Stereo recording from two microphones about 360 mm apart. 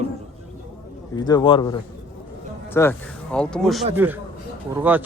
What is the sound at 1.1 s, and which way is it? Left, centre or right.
Speech, centre.